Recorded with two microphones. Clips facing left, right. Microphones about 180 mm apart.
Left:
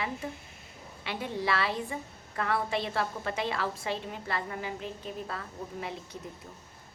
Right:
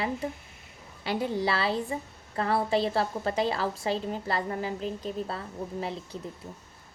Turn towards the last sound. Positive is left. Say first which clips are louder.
# right 4 dB
turn(degrees=-30)  # may be behind; listen again after turning